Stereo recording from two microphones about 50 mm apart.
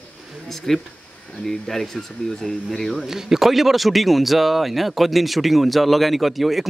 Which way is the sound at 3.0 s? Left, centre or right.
Centre.